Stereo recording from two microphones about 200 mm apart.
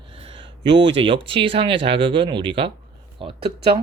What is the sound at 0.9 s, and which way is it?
Speech, 25° right (ahead or behind).